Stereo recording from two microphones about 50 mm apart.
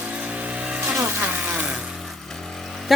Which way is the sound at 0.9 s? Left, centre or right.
Right.